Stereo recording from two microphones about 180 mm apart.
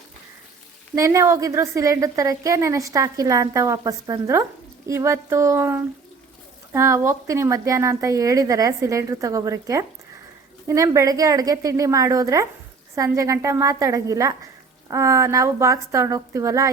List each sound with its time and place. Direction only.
0.9 s a woman's voice: 15° right (ahead or behind)